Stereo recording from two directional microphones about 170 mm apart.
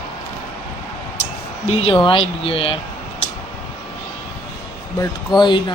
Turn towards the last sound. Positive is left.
turn(degrees=25)  # may be behind; listen again after turning